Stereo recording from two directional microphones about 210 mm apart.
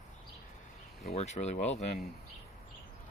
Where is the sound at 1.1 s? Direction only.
30° left (ahead or behind).